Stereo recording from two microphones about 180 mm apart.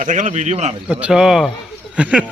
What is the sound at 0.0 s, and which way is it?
Speech, 45° right (ahead or behind).